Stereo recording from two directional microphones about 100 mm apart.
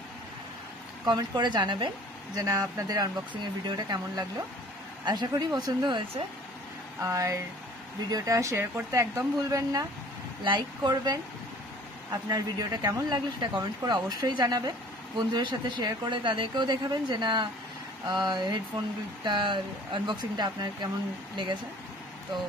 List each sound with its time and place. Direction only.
1.0 s speech: 45° right (ahead or behind)
2.3 s speech: 40° right (ahead or behind)
7.0 s speech: 30° right (ahead or behind)
10.4 s speech: 50° right (ahead or behind)
16.2 s speech: 50° right (ahead or behind)